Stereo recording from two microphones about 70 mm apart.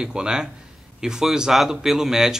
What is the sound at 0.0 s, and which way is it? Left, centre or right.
Speech, centre.